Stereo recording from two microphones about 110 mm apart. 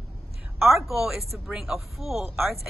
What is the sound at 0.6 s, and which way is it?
A woman's voice, centre (ahead or behind).